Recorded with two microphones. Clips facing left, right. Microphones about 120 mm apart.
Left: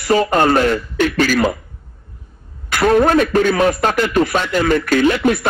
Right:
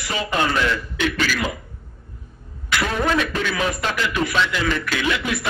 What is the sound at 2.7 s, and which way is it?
A man's voice, 50° left (ahead or behind).